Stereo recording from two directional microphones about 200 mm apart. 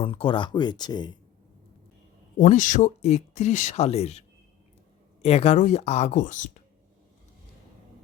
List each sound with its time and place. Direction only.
0.0 s speech: 25° left (ahead or behind)
2.4 s speech: 40° left (ahead or behind)
5.2 s speech: 30° left (ahead or behind)